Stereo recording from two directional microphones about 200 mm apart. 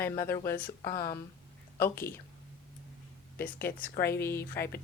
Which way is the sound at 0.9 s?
45° left (ahead or behind).